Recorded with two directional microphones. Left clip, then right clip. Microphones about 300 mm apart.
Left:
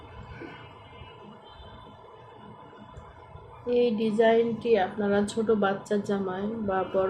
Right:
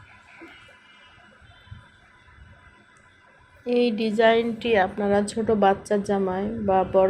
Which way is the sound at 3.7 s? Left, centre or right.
Right.